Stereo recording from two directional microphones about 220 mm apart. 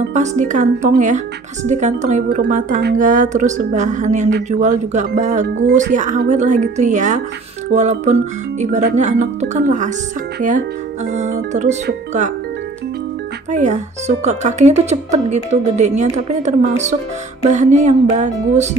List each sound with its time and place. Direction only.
0.1 s speech: 30° right (ahead or behind)
11.1 s speech: 35° right (ahead or behind)
13.5 s speech: 30° right (ahead or behind)